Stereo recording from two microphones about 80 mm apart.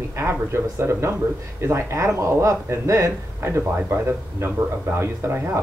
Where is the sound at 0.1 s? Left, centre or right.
Right.